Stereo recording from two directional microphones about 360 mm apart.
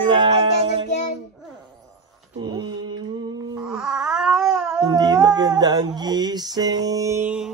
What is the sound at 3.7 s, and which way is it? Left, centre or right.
Cat, centre.